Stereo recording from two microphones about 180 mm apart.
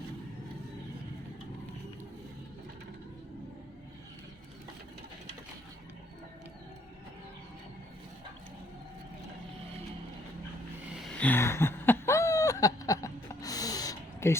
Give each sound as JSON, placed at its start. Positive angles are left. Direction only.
{"t": 10.9, "sound": "chuckle", "side_deg": 5}